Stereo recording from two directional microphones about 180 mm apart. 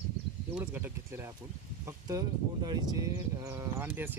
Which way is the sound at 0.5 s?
10° right (ahead or behind).